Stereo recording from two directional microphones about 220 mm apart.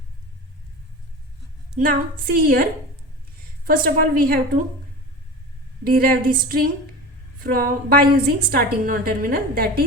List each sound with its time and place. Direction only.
1.8 s a woman's voice: 40° right (ahead or behind)
3.7 s a woman's voice: 40° right (ahead or behind)
5.8 s a woman's voice: 40° right (ahead or behind)